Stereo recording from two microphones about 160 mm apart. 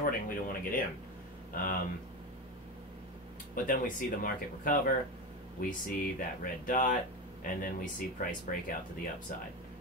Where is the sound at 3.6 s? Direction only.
60° left (ahead or behind).